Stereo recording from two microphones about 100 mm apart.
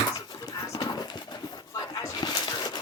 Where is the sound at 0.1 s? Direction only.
40° left (ahead or behind).